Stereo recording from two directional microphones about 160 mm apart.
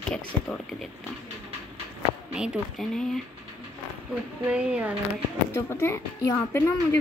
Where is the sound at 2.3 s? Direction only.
5° right (ahead or behind).